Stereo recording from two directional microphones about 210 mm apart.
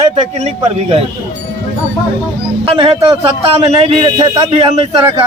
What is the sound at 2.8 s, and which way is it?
Speech, 25° right (ahead or behind).